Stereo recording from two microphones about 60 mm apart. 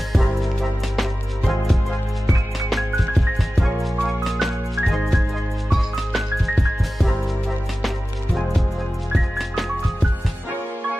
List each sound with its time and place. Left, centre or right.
0.1 s music: centre
2.7 s music: centre